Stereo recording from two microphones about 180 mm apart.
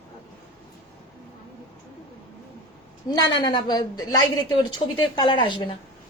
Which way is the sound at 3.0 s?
20° left (ahead or behind).